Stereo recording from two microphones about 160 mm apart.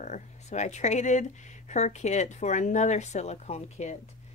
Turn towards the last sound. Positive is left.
turn(degrees=45)  # may be behind; listen again after turning